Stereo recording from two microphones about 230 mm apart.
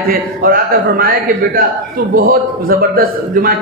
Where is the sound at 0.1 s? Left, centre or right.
Right.